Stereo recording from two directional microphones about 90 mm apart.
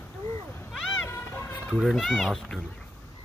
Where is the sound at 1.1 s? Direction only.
30° left (ahead or behind).